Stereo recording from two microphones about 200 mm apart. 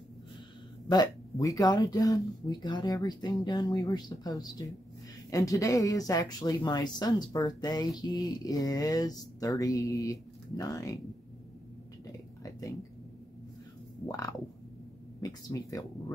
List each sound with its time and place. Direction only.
0.8 s speech: 20° left (ahead or behind)
12.4 s whispering: 15° left (ahead or behind)
14.0 s speech: 15° left (ahead or behind)